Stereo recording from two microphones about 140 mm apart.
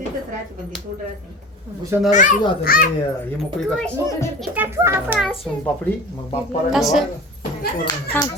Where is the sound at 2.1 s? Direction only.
65° left (ahead or behind).